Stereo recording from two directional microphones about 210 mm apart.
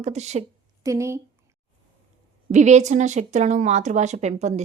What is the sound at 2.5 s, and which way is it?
Speech, 35° right (ahead or behind).